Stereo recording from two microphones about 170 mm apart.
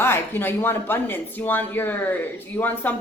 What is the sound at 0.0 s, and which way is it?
A woman's voice, 15° left (ahead or behind).